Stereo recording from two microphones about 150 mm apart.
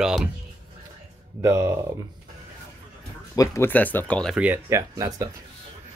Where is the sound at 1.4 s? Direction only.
15° right (ahead or behind).